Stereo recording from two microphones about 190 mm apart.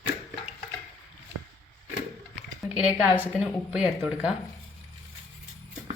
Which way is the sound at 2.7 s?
5° right (ahead or behind).